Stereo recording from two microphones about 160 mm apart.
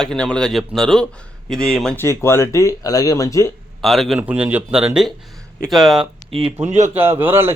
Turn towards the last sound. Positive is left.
turn(degrees=-15)  # may be behind; listen again after turning